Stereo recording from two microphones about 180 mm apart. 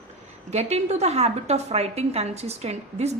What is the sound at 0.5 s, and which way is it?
A woman's voice, 35° right (ahead or behind).